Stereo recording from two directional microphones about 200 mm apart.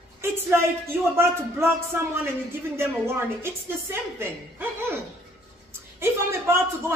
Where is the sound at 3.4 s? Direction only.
10° right (ahead or behind).